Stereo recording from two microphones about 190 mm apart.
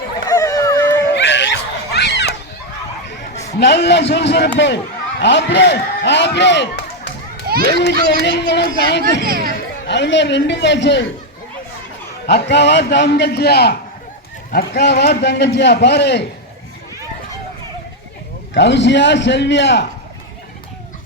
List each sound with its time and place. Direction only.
0.3 s dog: 20° left (ahead or behind)
1.1 s a sound: 70° left (ahead or behind)
3.6 s a man's voice: 60° left (ahead or behind)
8.2 s a man's voice: 65° left (ahead or behind)
9.2 s speech: 50° right (ahead or behind)
9.8 s a man's voice: 65° left (ahead or behind)
12.3 s a man's voice: 60° left (ahead or behind)
18.5 s a man's voice: 70° left (ahead or behind)